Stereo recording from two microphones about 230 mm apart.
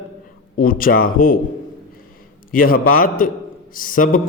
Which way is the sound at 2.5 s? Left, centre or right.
Left.